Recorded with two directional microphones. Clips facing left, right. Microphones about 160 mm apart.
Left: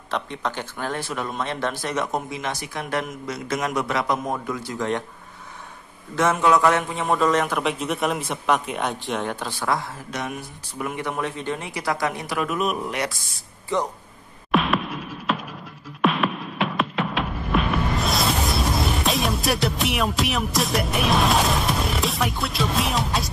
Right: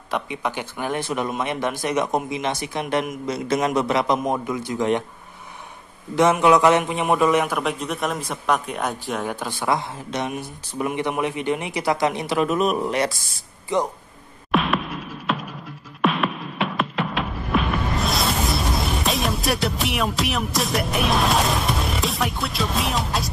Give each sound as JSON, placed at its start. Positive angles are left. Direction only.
{"t": 0.1, "sound": "a man's voice", "side_deg": -10}
{"t": 6.1, "sound": "a man's voice", "side_deg": -15}
{"t": 14.5, "sound": "music", "side_deg": 0}